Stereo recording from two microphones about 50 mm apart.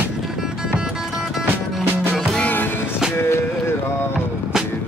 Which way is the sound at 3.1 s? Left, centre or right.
Left.